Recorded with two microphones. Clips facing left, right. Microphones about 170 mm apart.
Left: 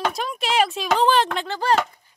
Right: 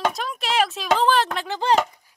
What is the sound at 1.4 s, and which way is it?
Speech, 15° right (ahead or behind).